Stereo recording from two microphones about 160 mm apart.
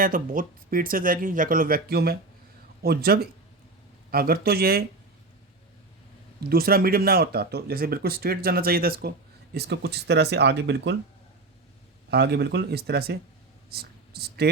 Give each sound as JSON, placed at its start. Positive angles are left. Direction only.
{"t": 0.0, "sound": "speech", "side_deg": -60}
{"t": 6.4, "sound": "speech", "side_deg": -70}
{"t": 9.6, "sound": "speech", "side_deg": -90}
{"t": 12.1, "sound": "speech", "side_deg": -90}